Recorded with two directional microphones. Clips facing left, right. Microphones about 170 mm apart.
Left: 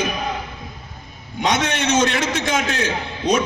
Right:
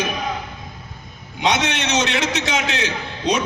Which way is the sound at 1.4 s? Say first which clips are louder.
Left 1 dB; 50° left (ahead or behind).